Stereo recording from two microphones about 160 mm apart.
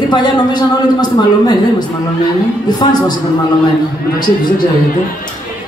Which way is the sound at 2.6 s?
25° left (ahead or behind).